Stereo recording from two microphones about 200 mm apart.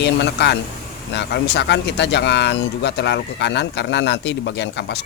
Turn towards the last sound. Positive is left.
turn(degrees=60)  # may be behind; listen again after turning